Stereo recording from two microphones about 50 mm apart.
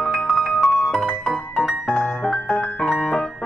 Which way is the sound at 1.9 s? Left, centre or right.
Left.